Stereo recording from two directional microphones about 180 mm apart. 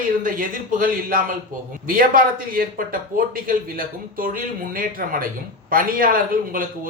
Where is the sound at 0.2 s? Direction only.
50° right (ahead or behind).